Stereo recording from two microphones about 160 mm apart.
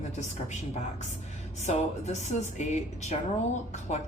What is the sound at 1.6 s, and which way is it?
A woman's voice, 45° left (ahead or behind).